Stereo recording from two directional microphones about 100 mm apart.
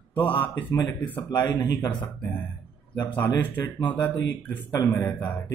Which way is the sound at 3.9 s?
15° left (ahead or behind).